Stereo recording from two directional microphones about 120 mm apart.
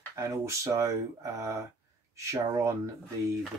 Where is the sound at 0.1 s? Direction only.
25° right (ahead or behind).